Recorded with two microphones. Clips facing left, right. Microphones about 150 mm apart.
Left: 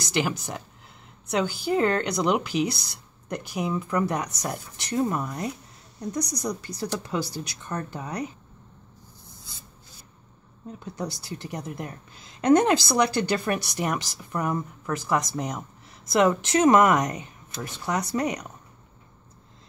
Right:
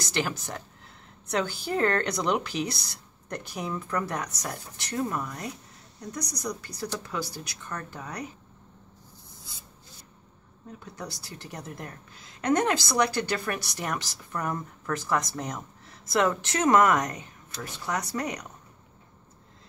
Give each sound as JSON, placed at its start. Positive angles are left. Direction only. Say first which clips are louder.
{"t": 0.1, "sound": "speech", "louder": "left 4 dB", "side_deg": 10}
{"t": 11.0, "sound": "speech", "louder": "left 8 dB", "side_deg": 20}
{"t": 12.4, "sound": "speech", "louder": "left 6 dB", "side_deg": 25}